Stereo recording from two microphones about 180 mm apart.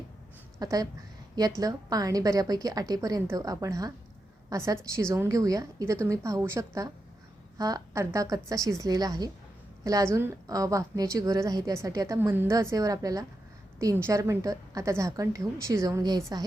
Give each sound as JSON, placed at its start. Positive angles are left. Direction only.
{"t": 0.6, "sound": "a woman's voice", "side_deg": -20}